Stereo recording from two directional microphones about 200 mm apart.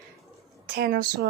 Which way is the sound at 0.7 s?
45° right (ahead or behind).